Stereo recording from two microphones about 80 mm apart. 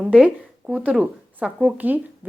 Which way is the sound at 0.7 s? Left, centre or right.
Centre.